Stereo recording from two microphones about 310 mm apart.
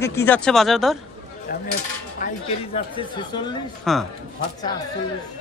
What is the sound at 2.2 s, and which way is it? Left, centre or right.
Speech, left.